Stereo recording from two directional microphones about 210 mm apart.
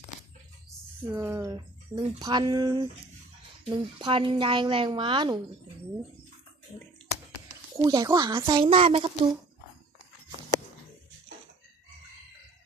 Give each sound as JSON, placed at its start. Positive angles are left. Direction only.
{"t": 1.1, "sound": "a woman's voice", "side_deg": -15}
{"t": 7.8, "sound": "a woman's voice", "side_deg": -20}